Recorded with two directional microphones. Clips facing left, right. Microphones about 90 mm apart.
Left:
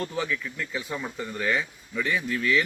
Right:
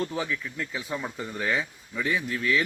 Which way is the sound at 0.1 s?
30° right (ahead or behind).